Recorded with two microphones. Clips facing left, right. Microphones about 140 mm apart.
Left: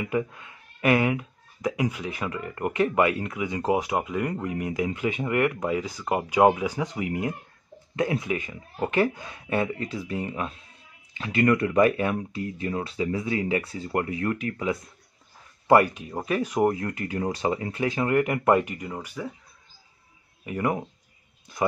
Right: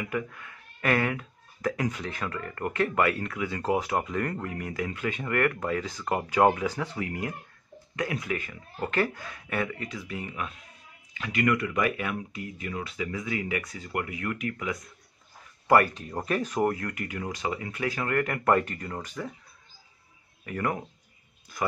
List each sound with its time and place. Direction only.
0.0 s speech: 20° left (ahead or behind)
15.9 s speech: 5° left (ahead or behind)
16.7 s speech: 25° left (ahead or behind); by 19.3 s 10° left (ahead or behind)
20.4 s speech: 20° left (ahead or behind)